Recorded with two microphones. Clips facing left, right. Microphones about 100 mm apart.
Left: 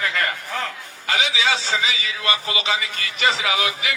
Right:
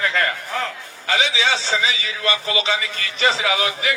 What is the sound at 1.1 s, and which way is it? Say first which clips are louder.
A man's voice: right 1 dB; 30° right (ahead or behind).